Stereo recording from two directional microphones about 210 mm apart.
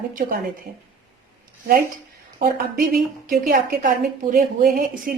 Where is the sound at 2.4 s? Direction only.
40° right (ahead or behind).